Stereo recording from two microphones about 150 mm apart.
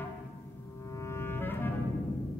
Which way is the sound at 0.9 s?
20° left (ahead or behind).